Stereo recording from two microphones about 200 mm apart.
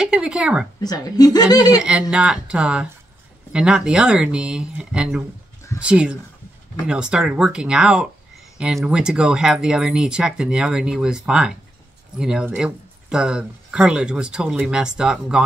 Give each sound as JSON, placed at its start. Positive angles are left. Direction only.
{"t": 0.0, "sound": "speech", "side_deg": -5}
{"t": 0.7, "sound": "speech", "side_deg": 20}
{"t": 1.8, "sound": "speech", "side_deg": -5}